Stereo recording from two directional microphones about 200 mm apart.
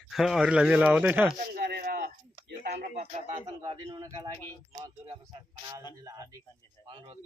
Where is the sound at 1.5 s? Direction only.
50° right (ahead or behind).